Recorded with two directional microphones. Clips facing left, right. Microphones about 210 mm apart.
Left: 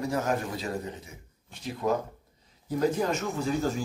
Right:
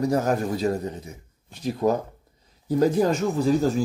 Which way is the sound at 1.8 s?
40° right (ahead or behind).